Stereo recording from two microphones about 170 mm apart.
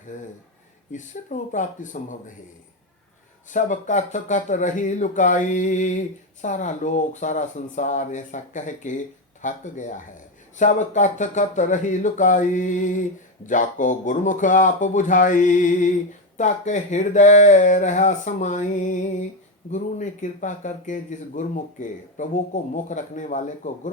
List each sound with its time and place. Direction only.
0.1 s speech: 50° left (ahead or behind)
3.5 s speech: 45° left (ahead or behind)